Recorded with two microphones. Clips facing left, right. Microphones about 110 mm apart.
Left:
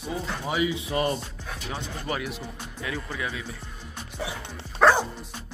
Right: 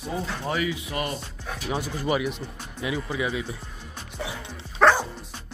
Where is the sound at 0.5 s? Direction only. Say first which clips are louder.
Left 4 dB; 25° left (ahead or behind).